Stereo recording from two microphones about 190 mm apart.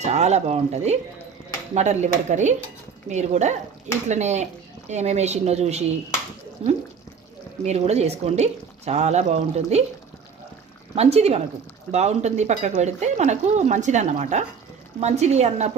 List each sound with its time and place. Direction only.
0.0 s speech: 35° right (ahead or behind)
10.9 s speech: 35° right (ahead or behind)